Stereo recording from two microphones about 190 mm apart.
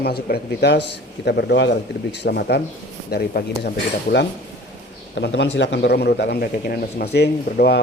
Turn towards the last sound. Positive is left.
turn(degrees=60)  # may be behind; listen again after turning